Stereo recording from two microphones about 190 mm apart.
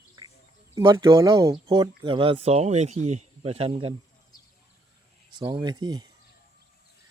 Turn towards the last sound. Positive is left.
turn(degrees=-20)  # may be behind; listen again after turning